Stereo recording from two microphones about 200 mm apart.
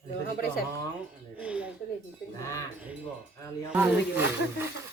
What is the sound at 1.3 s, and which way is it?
Speech, 5° right (ahead or behind).